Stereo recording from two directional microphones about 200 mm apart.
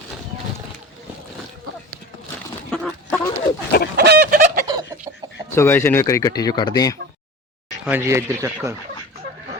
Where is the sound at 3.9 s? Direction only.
55° right (ahead or behind).